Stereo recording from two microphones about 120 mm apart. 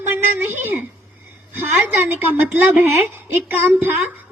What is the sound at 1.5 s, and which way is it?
A woman's voice, 15° right (ahead or behind).